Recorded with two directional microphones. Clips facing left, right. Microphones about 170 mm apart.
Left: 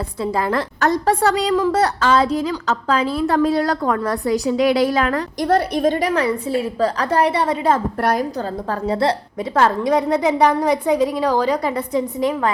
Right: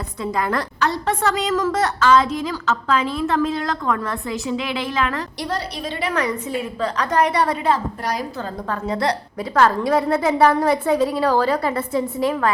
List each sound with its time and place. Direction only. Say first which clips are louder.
0.2 s a woman's voice: left 2 dB; 30° left (ahead or behind)
0.8 s a woman's voice: left 6 dB; 40° left (ahead or behind)
8.0 s a woman's voice: left 9 dB; 50° left (ahead or behind)
8.7 s a woman's voice: left 3 dB; 30° left (ahead or behind)